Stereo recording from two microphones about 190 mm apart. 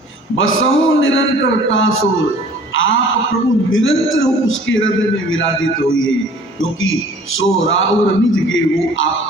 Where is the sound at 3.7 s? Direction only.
90° left.